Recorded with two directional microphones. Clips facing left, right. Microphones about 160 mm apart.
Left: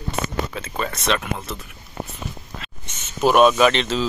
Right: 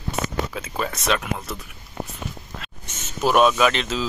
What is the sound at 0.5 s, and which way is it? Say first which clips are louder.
Speech: even; 5° right (ahead or behind).